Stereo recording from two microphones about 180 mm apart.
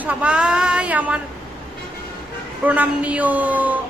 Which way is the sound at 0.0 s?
5° right (ahead or behind).